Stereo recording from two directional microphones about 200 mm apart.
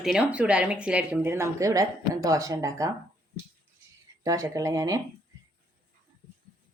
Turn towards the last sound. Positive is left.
turn(degrees=-15)  # may be behind; listen again after turning